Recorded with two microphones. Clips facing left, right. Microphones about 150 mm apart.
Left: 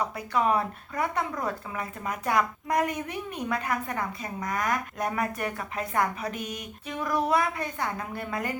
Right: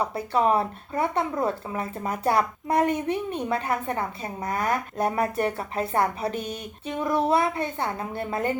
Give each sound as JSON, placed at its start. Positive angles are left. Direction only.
{"t": 0.0, "sound": "speech", "side_deg": -30}